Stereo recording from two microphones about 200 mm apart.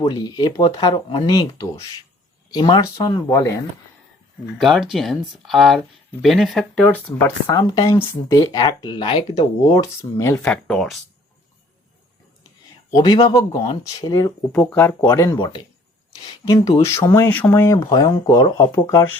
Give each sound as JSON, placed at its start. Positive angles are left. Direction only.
{"t": 0.0, "sound": "speech", "side_deg": 20}
{"t": 4.5, "sound": "speech", "side_deg": 0}
{"t": 7.2, "sound": "speech", "side_deg": 10}
{"t": 10.0, "sound": "speech", "side_deg": 15}
{"t": 12.9, "sound": "speech", "side_deg": 20}
{"t": 14.5, "sound": "speech", "side_deg": 5}